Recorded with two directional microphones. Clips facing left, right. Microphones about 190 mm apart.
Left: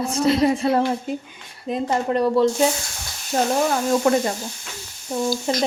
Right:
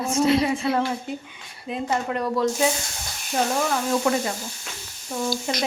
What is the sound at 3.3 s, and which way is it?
Speech, 40° left (ahead or behind).